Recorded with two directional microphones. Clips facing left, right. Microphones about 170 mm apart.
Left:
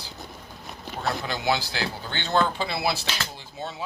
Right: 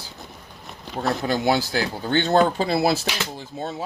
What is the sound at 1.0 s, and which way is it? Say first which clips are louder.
Speech: right 6 dB; 45° right (ahead or behind).